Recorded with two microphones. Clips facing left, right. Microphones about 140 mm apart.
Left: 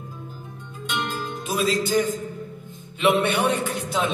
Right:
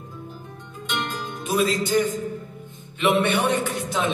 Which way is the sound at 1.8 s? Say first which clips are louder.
Even; 20° right (ahead or behind).